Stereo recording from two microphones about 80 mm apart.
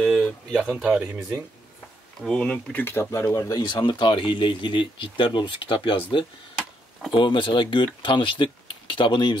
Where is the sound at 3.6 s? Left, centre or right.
Left.